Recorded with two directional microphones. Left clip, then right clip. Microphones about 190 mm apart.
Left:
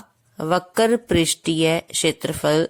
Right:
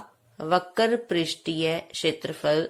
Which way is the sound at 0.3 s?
45° left (ahead or behind).